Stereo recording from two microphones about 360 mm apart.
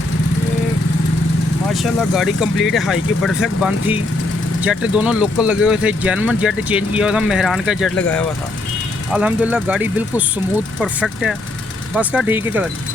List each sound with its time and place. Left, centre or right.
1.7 s speech: centre